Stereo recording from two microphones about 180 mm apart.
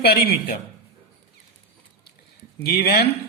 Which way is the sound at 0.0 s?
60° left (ahead or behind).